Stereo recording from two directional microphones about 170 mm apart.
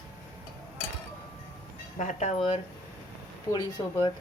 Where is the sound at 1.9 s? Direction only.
45° left (ahead or behind).